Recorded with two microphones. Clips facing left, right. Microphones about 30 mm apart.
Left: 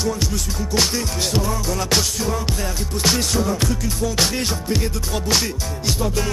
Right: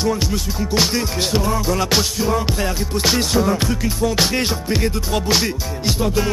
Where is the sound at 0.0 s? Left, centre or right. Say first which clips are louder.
Right 3 dB; right.